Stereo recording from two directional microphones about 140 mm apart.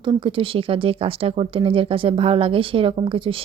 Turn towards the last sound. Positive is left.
turn(degrees=-40)  # may be behind; listen again after turning